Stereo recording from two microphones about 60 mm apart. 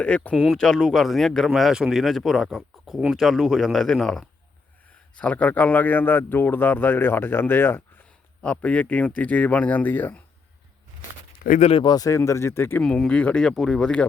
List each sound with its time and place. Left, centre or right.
0.0 s speech: left
0.3 s speech: centre
5.1 s speech: left
11.9 s speech: left
13.1 s speech: centre
13.5 s speech: centre